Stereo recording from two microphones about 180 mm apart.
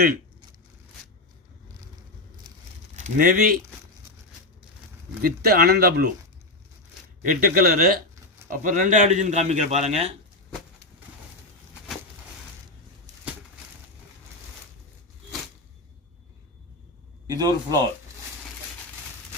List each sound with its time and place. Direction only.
2.9 s speech: 45° right (ahead or behind)
5.2 s speech: 55° right (ahead or behind)
7.3 s a man's voice: 50° right (ahead or behind)
17.2 s a man's voice: 20° right (ahead or behind)